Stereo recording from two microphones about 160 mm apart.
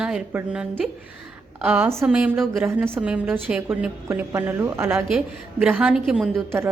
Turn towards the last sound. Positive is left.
turn(degrees=0)  # may be behind; listen again after turning